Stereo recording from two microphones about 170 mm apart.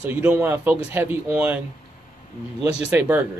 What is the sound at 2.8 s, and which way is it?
Speech, 10° right (ahead or behind).